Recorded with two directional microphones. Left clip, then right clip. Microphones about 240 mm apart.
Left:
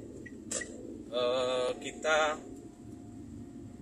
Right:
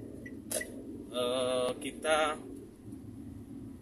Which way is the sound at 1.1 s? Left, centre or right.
Centre.